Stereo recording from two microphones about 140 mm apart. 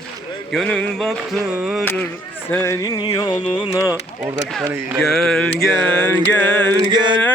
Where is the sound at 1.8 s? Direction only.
15° left (ahead or behind).